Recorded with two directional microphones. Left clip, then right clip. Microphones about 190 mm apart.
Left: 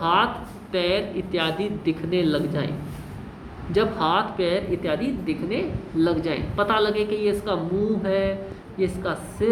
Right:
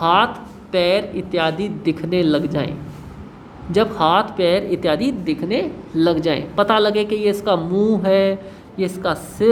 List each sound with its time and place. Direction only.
0.0 s speech: 50° right (ahead or behind)
3.7 s speech: 45° right (ahead or behind)